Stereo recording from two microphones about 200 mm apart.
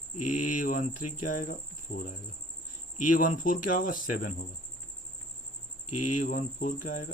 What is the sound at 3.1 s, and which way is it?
Speech, 40° left (ahead or behind).